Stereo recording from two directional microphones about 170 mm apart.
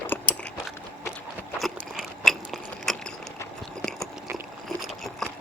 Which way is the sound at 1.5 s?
Centre (ahead or behind).